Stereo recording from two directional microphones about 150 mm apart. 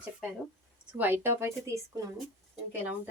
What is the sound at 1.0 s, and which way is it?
Speech, 15° right (ahead or behind).